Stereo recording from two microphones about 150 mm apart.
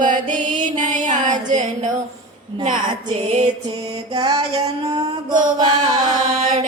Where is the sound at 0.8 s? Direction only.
55° right (ahead or behind).